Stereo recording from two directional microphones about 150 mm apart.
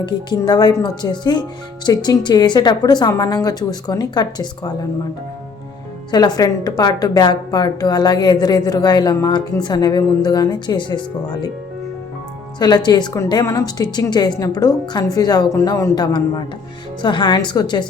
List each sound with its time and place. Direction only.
0.3 s a woman's voice: 25° left (ahead or behind)
6.1 s a woman's voice: 25° left (ahead or behind)
12.5 s a woman's voice: 30° left (ahead or behind)